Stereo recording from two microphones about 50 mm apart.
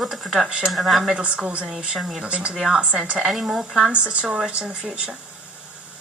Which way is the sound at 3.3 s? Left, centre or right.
Centre.